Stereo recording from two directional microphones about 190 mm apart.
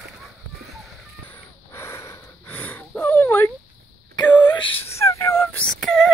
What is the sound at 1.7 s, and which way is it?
Wheeze, 15° left (ahead or behind).